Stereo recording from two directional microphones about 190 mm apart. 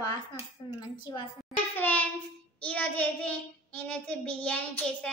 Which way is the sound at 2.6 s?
5° left (ahead or behind).